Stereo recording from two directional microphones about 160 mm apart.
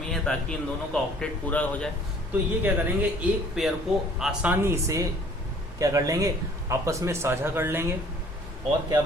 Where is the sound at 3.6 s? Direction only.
5° right (ahead or behind).